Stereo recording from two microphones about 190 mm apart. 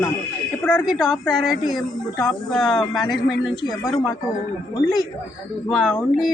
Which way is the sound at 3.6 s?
20° left (ahead or behind).